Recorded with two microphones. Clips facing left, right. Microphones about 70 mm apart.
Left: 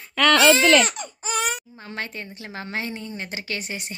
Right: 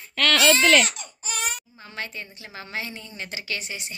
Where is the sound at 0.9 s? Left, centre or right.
Left.